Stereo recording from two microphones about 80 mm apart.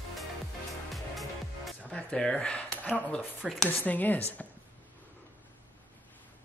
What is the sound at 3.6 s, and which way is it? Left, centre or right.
Speech, left.